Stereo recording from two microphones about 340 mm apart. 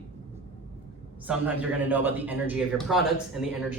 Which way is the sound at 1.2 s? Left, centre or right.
Centre.